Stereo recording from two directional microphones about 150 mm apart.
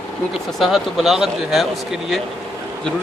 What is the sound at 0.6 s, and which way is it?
Speech, centre (ahead or behind).